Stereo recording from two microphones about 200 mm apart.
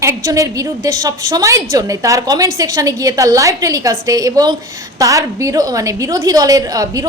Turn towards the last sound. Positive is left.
turn(degrees=-20)  # may be behind; listen again after turning